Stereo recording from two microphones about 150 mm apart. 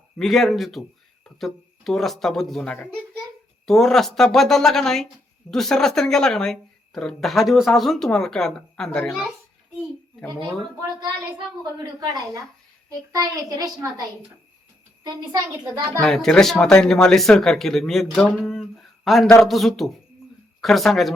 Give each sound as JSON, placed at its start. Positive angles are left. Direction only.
{"t": 0.2, "sound": "speech", "side_deg": 0}
{"t": 10.2, "sound": "speech", "side_deg": -25}
{"t": 15.0, "sound": "speech", "side_deg": -25}
{"t": 16.0, "sound": "speech", "side_deg": 5}